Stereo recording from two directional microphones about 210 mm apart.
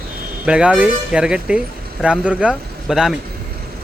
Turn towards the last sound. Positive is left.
turn(degrees=0)  # may be behind; listen again after turning